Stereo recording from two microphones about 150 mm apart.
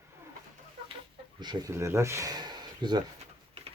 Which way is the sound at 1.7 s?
15° right (ahead or behind).